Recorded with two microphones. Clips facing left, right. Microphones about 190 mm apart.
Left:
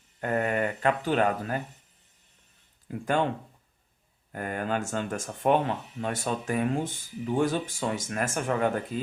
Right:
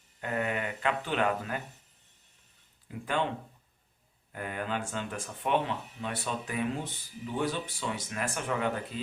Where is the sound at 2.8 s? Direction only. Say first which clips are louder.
Left 5 dB; 45° left (ahead or behind).